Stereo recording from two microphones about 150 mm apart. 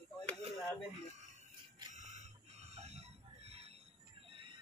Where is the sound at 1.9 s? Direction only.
50° right (ahead or behind); by 4.6 s 35° right (ahead or behind).